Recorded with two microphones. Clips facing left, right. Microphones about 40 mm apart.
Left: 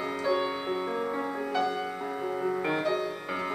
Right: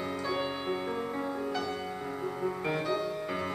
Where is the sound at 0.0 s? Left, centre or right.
Centre.